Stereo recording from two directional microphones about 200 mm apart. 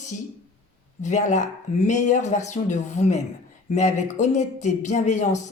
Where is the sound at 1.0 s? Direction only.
35° left (ahead or behind).